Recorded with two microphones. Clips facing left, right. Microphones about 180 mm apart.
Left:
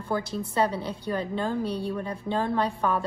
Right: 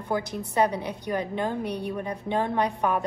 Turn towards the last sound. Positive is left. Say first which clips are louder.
# right 1 dB
turn(degrees=-15)  # may be behind; listen again after turning